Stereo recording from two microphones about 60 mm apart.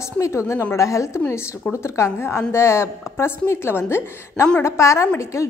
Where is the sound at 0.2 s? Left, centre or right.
Left.